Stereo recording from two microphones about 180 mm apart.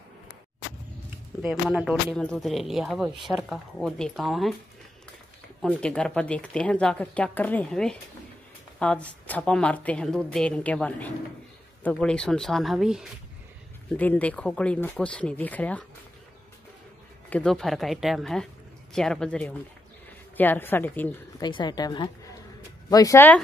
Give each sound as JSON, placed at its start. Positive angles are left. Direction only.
{"t": 1.4, "sound": "a woman's voice", "side_deg": -5}
{"t": 5.6, "sound": "a woman's voice", "side_deg": 5}
{"t": 13.9, "sound": "speech", "side_deg": 10}
{"t": 17.3, "sound": "a woman's voice", "side_deg": 5}
{"t": 21.4, "sound": "a woman's voice", "side_deg": 25}